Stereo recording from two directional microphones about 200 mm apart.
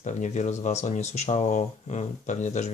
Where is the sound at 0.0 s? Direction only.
35° left (ahead or behind).